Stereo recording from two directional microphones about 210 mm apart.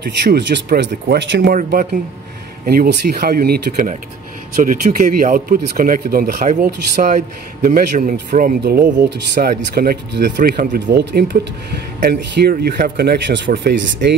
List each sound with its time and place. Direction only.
0.3 s speech: 50° right (ahead or behind)